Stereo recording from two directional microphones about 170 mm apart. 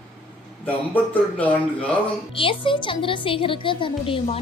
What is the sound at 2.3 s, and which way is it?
A woman's voice, 30° left (ahead or behind).